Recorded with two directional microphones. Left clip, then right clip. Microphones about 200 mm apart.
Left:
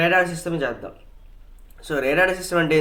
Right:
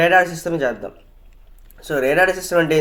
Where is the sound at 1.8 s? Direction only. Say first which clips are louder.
Right 3 dB; 35° right (ahead or behind).